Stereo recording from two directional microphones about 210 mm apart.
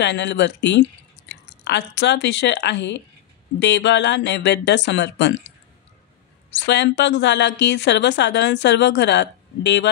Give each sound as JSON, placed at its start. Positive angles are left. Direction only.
{"t": 0.0, "sound": "a woman's voice", "side_deg": 55}
{"t": 6.5, "sound": "a woman's voice", "side_deg": 55}